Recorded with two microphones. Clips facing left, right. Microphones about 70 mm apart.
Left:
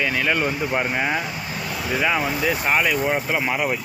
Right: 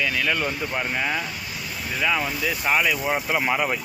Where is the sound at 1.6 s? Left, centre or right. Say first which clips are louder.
Left 6 dB; left.